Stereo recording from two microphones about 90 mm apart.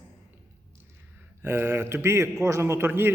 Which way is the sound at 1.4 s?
25° right (ahead or behind).